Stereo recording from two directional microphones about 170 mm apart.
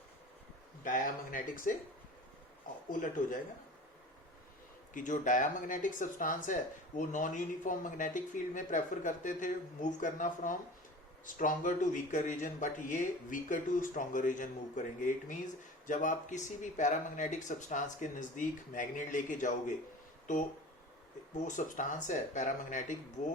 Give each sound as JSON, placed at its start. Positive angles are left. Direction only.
{"t": 0.9, "sound": "speech", "side_deg": 50}
{"t": 2.9, "sound": "speech", "side_deg": 50}
{"t": 4.9, "sound": "speech", "side_deg": 50}
{"t": 21.4, "sound": "speech", "side_deg": 50}